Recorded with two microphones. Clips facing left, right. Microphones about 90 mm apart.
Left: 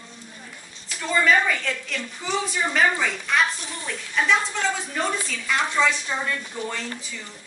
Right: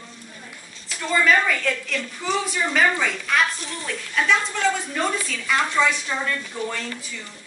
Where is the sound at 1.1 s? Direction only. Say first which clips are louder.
Right 1 dB; centre (ahead or behind).